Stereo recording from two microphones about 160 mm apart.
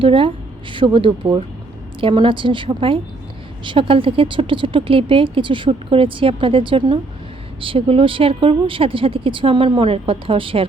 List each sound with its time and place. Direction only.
0.0 s speech: 35° right (ahead or behind)